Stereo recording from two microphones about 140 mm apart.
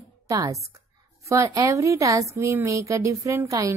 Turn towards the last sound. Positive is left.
turn(degrees=-20)  # may be behind; listen again after turning